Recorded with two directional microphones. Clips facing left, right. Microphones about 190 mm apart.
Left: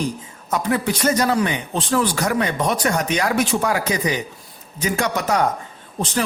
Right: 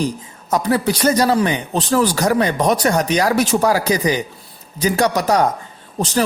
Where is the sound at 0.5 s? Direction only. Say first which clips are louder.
Right 4 dB; 35° right (ahead or behind).